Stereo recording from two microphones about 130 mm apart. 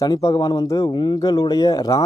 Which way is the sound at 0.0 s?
30° left (ahead or behind).